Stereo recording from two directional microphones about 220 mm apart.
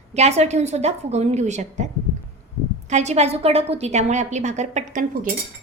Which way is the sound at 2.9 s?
30° right (ahead or behind).